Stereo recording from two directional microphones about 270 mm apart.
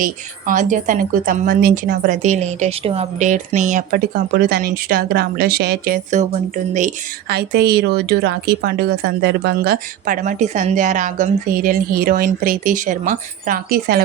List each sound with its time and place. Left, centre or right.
0.0 s a woman's voice: right